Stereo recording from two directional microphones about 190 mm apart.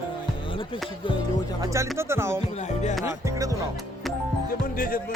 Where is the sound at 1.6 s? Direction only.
15° right (ahead or behind).